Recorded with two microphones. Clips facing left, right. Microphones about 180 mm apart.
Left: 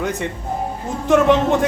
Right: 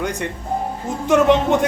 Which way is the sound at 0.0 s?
Centre (ahead or behind).